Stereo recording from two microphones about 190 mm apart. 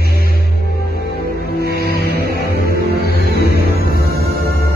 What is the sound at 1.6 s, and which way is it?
Music, 55° left (ahead or behind).